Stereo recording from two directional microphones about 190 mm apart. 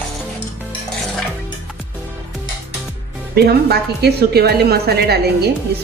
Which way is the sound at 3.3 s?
55° right (ahead or behind).